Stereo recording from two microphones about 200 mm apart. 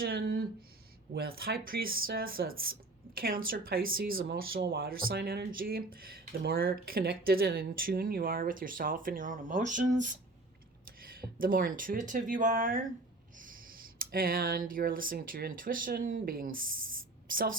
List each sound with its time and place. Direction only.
0.0 s speech: 50° right (ahead or behind)
11.2 s speech: 45° right (ahead or behind)